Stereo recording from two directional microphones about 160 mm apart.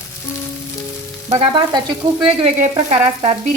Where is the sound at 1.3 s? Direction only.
40° right (ahead or behind).